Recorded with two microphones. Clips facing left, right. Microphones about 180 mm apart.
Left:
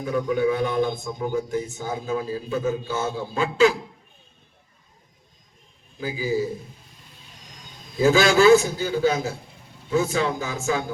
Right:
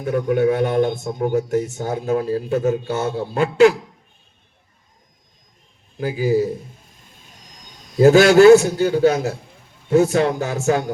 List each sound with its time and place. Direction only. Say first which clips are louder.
0.0 s speech: right 4 dB; 60° right (ahead or behind)
6.0 s speech: right 6 dB; 65° right (ahead or behind)
7.9 s a man's voice: right 7 dB; 65° right (ahead or behind)